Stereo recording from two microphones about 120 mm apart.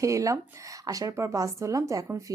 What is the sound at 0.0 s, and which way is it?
Speech, 25° right (ahead or behind).